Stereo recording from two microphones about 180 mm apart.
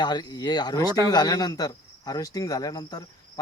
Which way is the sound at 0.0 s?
25° left (ahead or behind).